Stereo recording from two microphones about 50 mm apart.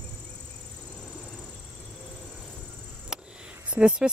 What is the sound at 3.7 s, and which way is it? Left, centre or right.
Speech, right.